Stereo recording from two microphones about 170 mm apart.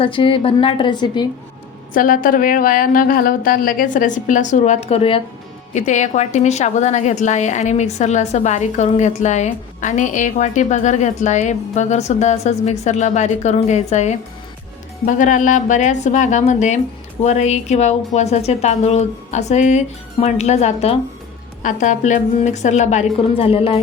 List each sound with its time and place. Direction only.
0.0 s a woman's voice: 30° left (ahead or behind)
1.9 s a woman's voice: 55° left (ahead or behind); by 21.0 s 35° left (ahead or behind)
21.6 s a woman's voice: 50° left (ahead or behind)